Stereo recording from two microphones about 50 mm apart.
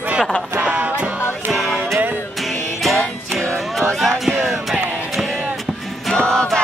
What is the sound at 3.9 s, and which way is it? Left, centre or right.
Music, centre.